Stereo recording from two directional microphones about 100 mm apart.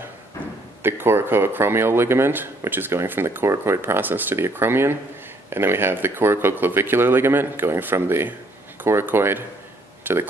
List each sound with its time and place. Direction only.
0.8 s speech: 25° right (ahead or behind)